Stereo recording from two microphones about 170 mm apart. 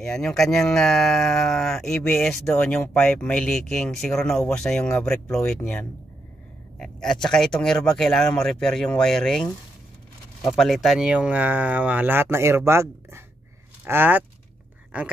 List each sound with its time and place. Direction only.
0.0 s speech: 5° left (ahead or behind)
10.6 s speech: centre (ahead or behind)